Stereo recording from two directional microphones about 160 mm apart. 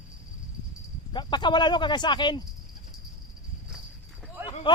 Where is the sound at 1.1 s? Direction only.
30° left (ahead or behind).